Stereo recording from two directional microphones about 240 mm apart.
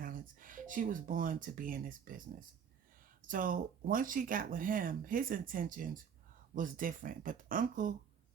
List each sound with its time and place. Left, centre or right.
0.0 s speech: right
3.2 s speech: right